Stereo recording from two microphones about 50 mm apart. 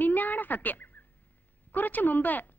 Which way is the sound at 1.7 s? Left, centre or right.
Left.